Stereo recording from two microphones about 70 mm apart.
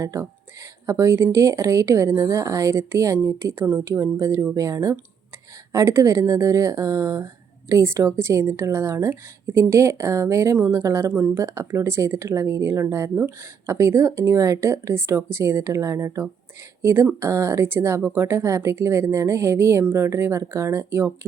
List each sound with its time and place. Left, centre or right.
0.0 s a woman's voice: right
5.7 s a woman's voice: right